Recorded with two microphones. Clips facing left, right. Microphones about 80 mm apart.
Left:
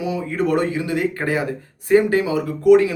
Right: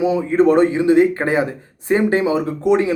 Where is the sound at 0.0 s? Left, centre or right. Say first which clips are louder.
Right 7 dB; right.